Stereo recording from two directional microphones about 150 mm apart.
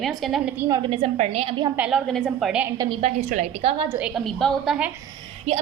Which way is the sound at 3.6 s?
40° right (ahead or behind).